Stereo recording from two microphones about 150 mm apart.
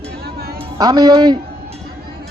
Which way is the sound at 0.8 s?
25° right (ahead or behind).